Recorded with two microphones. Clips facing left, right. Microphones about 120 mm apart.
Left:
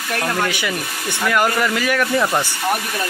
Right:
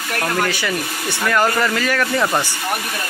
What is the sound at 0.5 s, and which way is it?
Speech, 20° left (ahead or behind).